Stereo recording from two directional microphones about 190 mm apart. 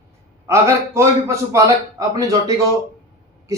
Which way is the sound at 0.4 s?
15° right (ahead or behind).